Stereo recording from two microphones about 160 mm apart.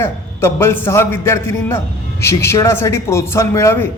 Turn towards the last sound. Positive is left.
turn(degrees=15)  # may be behind; listen again after turning